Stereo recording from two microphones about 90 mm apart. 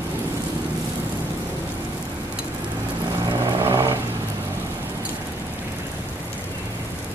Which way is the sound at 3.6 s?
30° right (ahead or behind).